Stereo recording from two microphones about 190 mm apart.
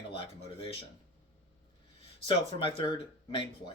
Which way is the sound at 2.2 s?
30° left (ahead or behind).